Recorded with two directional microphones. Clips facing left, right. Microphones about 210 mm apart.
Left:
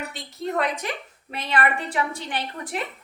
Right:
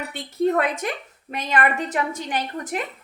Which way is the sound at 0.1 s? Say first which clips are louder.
Right 8 dB; 50° right (ahead or behind).